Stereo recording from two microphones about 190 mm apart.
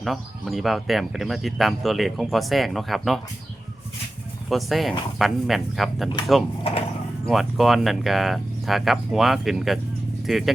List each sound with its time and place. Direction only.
0.0 s speech: centre (ahead or behind)
4.4 s speech: centre (ahead or behind)
6.7 s speech: 30° left (ahead or behind)
7.3 s speech: centre (ahead or behind)